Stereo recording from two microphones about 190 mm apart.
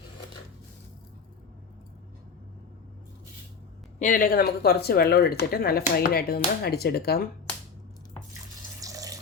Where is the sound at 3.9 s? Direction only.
45° left (ahead or behind).